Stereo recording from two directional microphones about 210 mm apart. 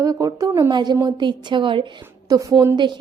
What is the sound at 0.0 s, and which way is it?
A woman's voice, 15° right (ahead or behind).